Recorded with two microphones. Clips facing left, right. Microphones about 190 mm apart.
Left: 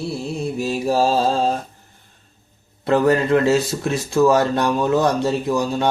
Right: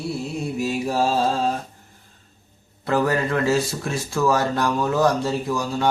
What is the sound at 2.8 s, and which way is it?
Speech, 25° left (ahead or behind).